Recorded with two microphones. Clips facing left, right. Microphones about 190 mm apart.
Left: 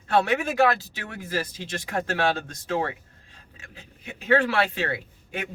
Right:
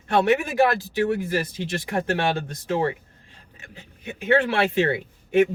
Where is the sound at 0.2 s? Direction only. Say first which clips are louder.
Right 3 dB; 20° right (ahead or behind).